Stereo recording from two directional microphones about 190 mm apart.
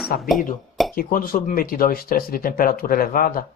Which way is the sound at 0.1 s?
45° left (ahead or behind).